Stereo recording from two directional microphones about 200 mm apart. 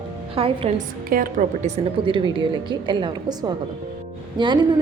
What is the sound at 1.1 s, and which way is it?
A woman's voice, 40° right (ahead or behind).